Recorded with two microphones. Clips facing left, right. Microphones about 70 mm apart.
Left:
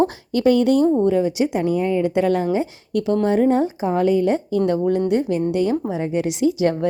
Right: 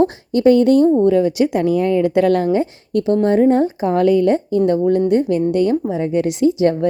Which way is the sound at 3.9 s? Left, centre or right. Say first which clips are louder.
Right 4 dB; right.